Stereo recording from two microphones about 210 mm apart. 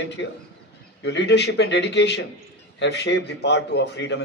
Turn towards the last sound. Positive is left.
turn(degrees=55)  # may be behind; listen again after turning